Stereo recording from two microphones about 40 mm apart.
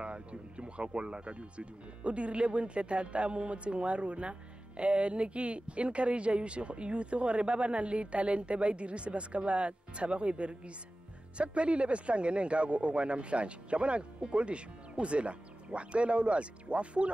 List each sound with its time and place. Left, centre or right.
0.0 s speech: right